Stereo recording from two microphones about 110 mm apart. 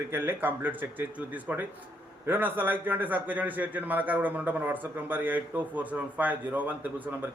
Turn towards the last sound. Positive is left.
turn(degrees=-15)  # may be behind; listen again after turning